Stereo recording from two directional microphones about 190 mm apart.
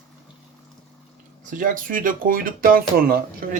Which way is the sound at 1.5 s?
45° right (ahead or behind).